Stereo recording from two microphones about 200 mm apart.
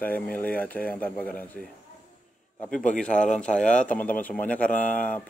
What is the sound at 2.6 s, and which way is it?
A man's voice, 5° left (ahead or behind).